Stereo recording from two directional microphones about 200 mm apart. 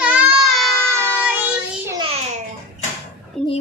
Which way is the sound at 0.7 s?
10° left (ahead or behind).